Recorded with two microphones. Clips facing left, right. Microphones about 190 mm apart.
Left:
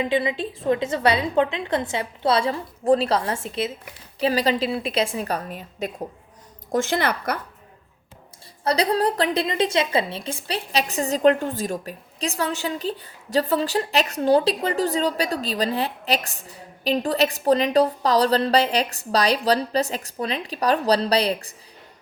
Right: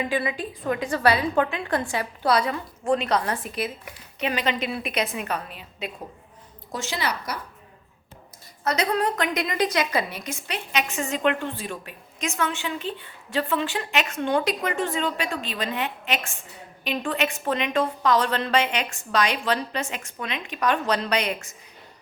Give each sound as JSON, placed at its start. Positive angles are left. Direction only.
{"t": 0.0, "sound": "a woman's voice", "side_deg": 20}
{"t": 8.6, "sound": "a woman's voice", "side_deg": 35}